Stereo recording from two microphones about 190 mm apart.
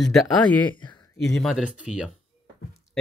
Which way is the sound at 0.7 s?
25° left (ahead or behind).